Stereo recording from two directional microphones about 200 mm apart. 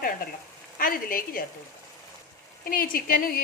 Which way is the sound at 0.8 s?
45° left (ahead or behind).